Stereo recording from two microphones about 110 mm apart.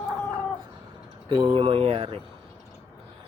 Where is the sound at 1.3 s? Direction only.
50° right (ahead or behind).